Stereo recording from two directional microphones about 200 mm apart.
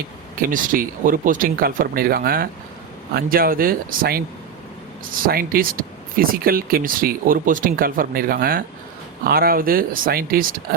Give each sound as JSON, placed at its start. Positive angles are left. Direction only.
{"t": 0.3, "sound": "speech", "side_deg": -45}
{"t": 5.2, "sound": "speech", "side_deg": -45}